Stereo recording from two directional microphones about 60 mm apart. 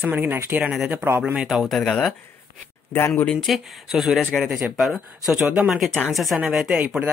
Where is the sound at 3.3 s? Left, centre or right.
Centre.